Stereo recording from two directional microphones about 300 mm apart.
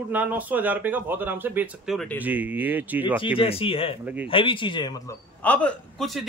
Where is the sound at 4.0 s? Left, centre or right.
Centre.